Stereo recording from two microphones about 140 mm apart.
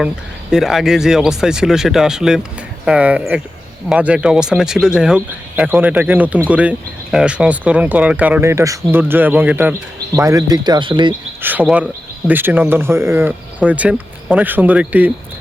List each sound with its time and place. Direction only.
0.5 s speech: centre (ahead or behind)
10.2 s speech: 25° right (ahead or behind)
11.4 s speech: 10° right (ahead or behind)